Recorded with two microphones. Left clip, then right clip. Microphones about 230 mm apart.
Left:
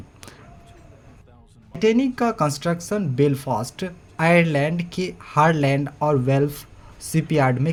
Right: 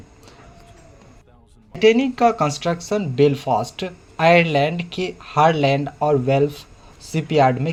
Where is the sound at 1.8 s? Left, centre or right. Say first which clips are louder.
Right 5 dB; left.